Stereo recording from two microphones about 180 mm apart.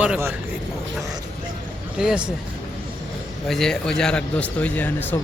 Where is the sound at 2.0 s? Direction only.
5° right (ahead or behind).